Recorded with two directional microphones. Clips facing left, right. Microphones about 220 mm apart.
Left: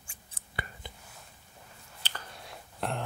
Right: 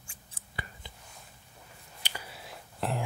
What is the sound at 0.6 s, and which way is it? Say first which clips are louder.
Whispering: left 3 dB; 65° left (ahead or behind).